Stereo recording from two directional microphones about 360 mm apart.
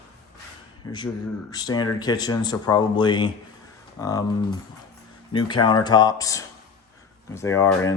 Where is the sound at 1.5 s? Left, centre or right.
Centre.